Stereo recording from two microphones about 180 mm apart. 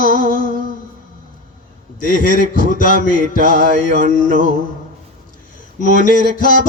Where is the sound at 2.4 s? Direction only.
45° left (ahead or behind).